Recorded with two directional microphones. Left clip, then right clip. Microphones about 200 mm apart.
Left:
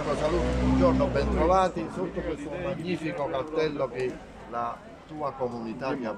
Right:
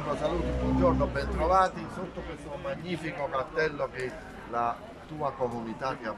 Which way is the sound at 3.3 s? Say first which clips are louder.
Even; 15° left (ahead or behind).